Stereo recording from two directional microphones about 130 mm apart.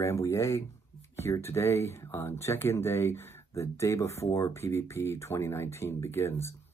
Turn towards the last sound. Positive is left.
turn(degrees=20)  # may be behind; listen again after turning